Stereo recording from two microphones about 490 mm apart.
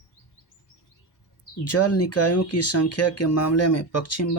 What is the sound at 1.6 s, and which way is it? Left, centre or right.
Speech, left.